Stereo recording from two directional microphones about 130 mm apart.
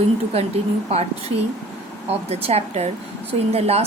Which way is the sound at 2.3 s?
50° right (ahead or behind).